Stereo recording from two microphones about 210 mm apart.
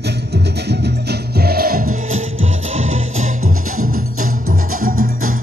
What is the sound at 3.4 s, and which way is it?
Music, 90° right.